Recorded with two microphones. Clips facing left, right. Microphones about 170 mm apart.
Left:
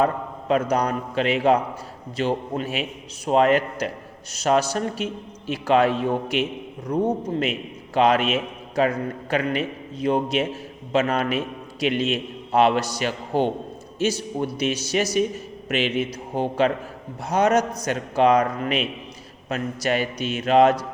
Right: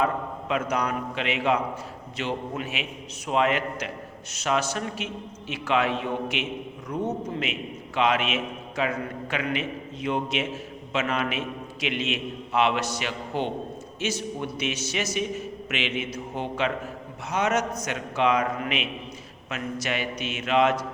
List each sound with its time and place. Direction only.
0.0 s a man's voice: 40° left (ahead or behind)